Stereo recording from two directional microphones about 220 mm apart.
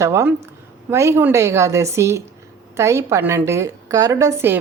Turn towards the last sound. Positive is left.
turn(degrees=-10)  # may be behind; listen again after turning